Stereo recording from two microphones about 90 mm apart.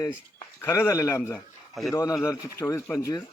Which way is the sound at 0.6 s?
30° left (ahead or behind).